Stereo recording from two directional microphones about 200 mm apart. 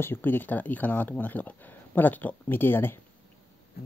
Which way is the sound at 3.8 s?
50° left (ahead or behind).